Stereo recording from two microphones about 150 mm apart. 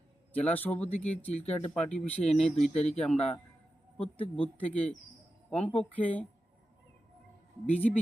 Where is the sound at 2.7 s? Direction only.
50° left (ahead or behind).